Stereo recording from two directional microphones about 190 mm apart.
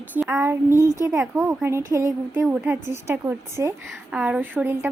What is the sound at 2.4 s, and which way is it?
A woman's voice, 5° right (ahead or behind).